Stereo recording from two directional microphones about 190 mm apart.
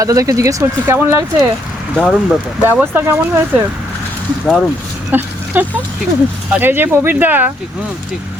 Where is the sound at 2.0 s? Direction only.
Centre (ahead or behind).